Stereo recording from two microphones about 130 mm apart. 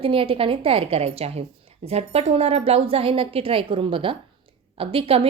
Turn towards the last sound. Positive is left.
turn(degrees=-45)  # may be behind; listen again after turning